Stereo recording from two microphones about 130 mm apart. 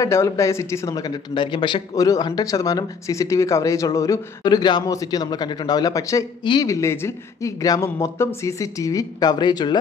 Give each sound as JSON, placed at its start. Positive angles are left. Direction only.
{"t": 0.0, "sound": "speech", "side_deg": 20}
{"t": 6.4, "sound": "speech", "side_deg": 35}
{"t": 6.7, "sound": "speech", "side_deg": 20}